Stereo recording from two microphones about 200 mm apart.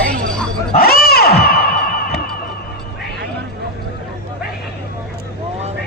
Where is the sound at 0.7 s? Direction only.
50° left (ahead or behind).